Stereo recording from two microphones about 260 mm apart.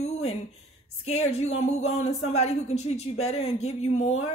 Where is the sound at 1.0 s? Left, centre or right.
Left.